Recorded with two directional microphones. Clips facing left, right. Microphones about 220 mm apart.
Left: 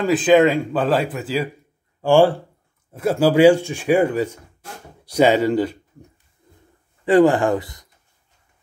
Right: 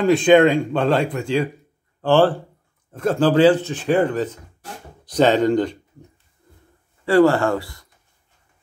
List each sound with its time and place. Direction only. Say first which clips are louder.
0.0 s speech: right 1 dB; 5° left (ahead or behind)
7.1 s speech: left 1 dB; 15° left (ahead or behind)